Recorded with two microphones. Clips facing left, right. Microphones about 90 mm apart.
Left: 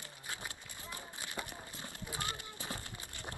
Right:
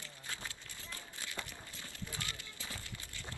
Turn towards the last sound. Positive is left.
turn(degrees=20)  # may be behind; listen again after turning